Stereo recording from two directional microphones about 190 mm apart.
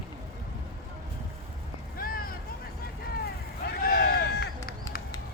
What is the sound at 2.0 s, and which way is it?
Vehicle, 50° left (ahead or behind).